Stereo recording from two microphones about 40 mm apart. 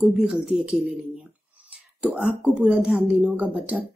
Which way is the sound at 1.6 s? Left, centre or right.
Right.